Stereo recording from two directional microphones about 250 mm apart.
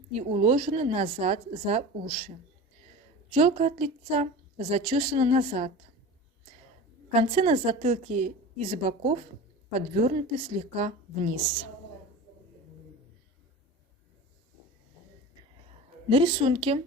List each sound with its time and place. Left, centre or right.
0.1 s a woman's voice: right
3.3 s a woman's voice: right
7.1 s a woman's voice: right
16.0 s a woman's voice: right